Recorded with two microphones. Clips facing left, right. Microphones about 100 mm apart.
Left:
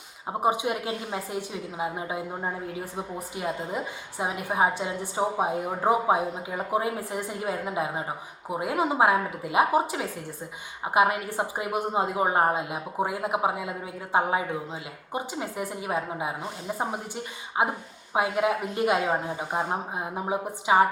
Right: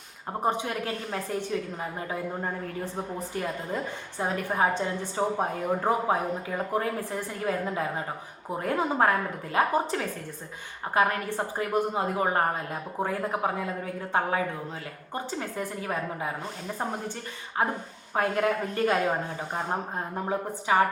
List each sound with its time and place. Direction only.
0.3 s a woman's voice: 10° left (ahead or behind)